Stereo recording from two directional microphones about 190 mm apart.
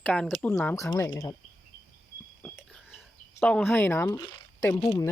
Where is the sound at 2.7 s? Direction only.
5° right (ahead or behind).